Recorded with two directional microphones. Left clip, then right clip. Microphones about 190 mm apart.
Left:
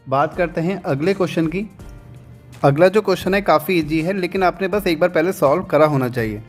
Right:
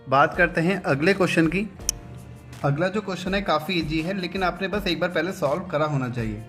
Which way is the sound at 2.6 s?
55° left (ahead or behind).